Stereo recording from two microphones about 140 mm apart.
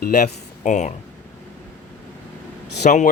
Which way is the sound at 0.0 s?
65° left (ahead or behind).